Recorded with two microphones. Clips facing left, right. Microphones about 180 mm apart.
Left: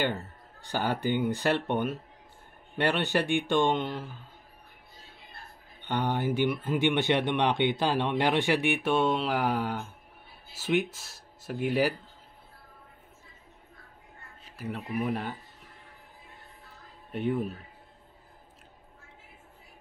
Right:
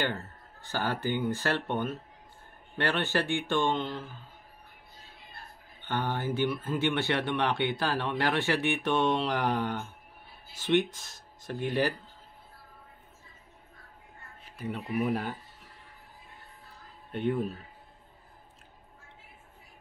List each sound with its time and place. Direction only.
0.0 s speech: 15° left (ahead or behind)
5.8 s speech: 15° left (ahead or behind)
14.6 s speech: centre (ahead or behind)
17.1 s speech: centre (ahead or behind)